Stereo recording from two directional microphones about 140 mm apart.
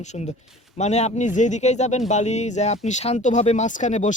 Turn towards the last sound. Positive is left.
turn(degrees=60)  # may be behind; listen again after turning